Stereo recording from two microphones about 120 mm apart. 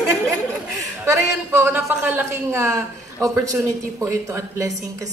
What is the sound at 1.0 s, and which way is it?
A man's voice, 25° right (ahead or behind).